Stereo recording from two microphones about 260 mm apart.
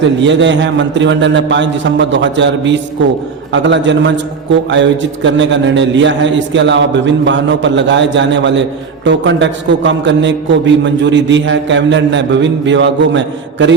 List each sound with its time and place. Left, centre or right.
0.0 s a man's voice: right